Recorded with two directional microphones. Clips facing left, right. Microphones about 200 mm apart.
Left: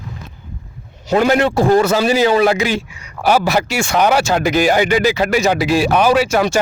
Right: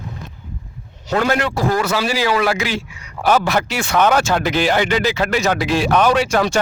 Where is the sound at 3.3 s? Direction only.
10° left (ahead or behind).